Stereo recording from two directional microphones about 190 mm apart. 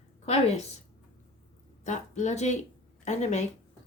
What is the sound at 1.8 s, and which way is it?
A woman's voice, 40° left (ahead or behind).